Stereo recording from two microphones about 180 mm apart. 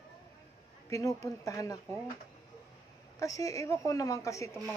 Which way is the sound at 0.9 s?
20° left (ahead or behind).